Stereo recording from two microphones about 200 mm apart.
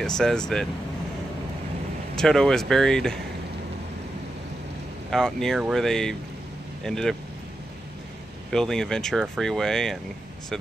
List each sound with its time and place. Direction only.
0.0 s speech: 5° left (ahead or behind)
2.1 s speech: 5° left (ahead or behind)
5.1 s speech: centre (ahead or behind)
8.5 s speech: centre (ahead or behind)